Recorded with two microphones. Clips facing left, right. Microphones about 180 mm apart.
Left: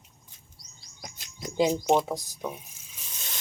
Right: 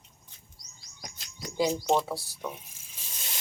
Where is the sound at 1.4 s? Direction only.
20° left (ahead or behind).